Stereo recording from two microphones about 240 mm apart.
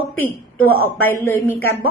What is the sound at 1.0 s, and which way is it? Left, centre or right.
Speech, centre.